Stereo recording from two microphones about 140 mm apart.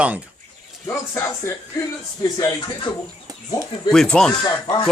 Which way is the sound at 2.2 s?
25° left (ahead or behind).